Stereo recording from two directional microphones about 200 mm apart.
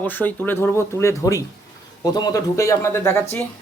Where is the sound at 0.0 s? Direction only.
10° left (ahead or behind).